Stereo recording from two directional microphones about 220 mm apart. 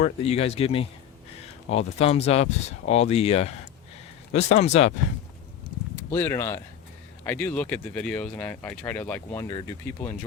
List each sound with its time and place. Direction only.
0.0 s speech: 25° left (ahead or behind)
2.0 s speech: 30° left (ahead or behind)
6.0 s speech: 10° left (ahead or behind)